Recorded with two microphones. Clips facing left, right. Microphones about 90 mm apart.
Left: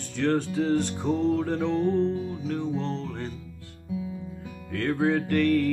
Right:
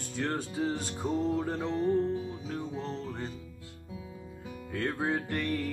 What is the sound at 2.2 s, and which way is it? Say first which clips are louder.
Music: left 6 dB; 20° right (ahead or behind).